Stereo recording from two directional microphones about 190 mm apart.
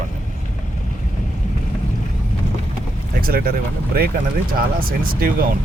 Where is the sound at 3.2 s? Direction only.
50° right (ahead or behind).